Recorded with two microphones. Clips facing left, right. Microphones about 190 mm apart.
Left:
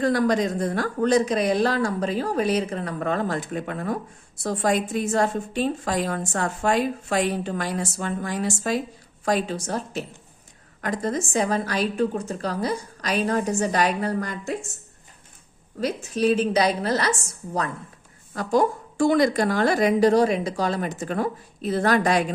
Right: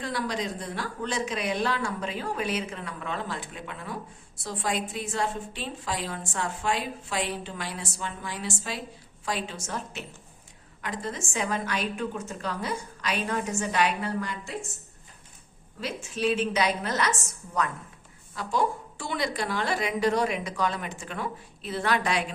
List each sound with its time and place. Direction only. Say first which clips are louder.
0.0 s a woman's voice: left 10 dB; 45° left (ahead or behind)
15.8 s a woman's voice: left 6 dB; 40° left (ahead or behind)
18.3 s a woman's voice: left 6 dB; 45° left (ahead or behind)